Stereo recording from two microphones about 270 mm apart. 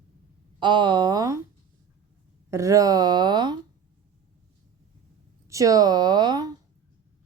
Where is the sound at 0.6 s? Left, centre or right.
Centre.